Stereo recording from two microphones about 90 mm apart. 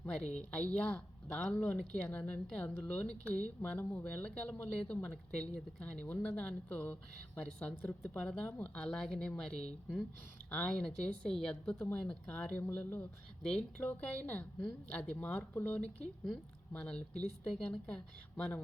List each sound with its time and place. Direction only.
0.1 s speech: 10° left (ahead or behind)
7.8 s speech: 25° left (ahead or behind)
8.2 s speech: 10° left (ahead or behind)
8.7 s speech: 5° left (ahead or behind)
13.4 s speech: 5° left (ahead or behind)